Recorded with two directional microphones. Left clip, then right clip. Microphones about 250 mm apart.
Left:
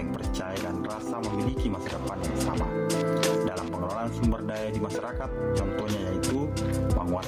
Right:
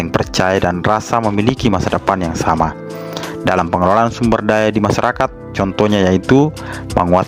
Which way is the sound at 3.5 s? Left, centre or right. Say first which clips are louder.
Right 19 dB; right.